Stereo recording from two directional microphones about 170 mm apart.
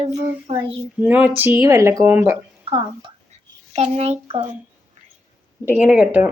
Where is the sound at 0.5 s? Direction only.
35° right (ahead or behind).